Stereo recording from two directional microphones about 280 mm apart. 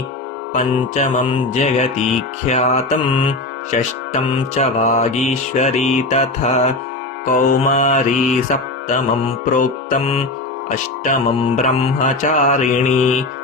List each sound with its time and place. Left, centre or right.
0.5 s music: left